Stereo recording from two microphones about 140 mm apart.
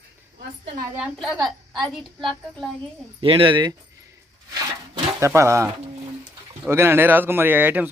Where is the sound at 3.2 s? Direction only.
40° right (ahead or behind).